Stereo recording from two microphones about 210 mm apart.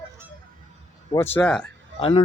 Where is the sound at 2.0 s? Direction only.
20° left (ahead or behind).